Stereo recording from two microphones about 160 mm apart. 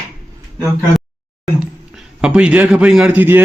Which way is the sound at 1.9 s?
5° right (ahead or behind).